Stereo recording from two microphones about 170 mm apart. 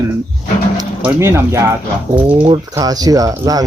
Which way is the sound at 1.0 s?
15° right (ahead or behind).